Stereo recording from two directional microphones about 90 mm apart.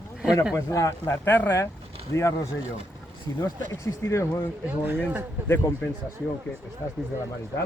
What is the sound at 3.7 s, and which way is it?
Speech, 30° left (ahead or behind).